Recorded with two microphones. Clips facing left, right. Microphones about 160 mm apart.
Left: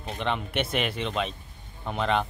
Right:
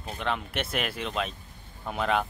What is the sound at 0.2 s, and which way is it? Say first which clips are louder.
Speech: left 2 dB; centre (ahead or behind).